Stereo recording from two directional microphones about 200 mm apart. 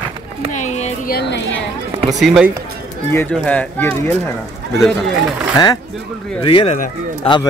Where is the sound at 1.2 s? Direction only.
60° left (ahead or behind).